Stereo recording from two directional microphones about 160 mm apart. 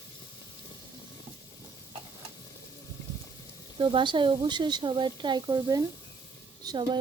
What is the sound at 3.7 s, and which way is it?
A woman's voice, 30° right (ahead or behind).